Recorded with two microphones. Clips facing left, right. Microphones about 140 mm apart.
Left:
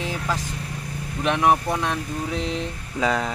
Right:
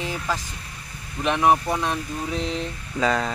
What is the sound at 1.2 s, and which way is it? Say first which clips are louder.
Speech: even; 5° left (ahead or behind).